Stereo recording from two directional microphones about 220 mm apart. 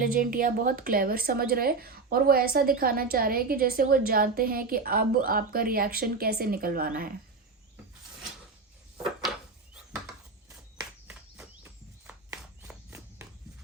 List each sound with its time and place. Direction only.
0.0 s speech: 40° right (ahead or behind)
11.1 s a sound: 5° right (ahead or behind)
12.6 s walk: 10° right (ahead or behind)